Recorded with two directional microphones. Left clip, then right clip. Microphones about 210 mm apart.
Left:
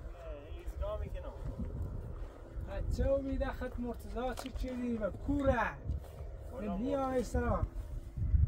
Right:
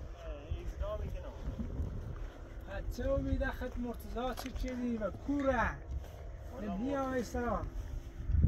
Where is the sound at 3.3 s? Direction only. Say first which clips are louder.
Even; 5° left (ahead or behind).